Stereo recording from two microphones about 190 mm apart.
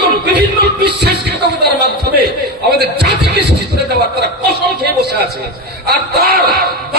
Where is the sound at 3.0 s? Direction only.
60° right (ahead or behind).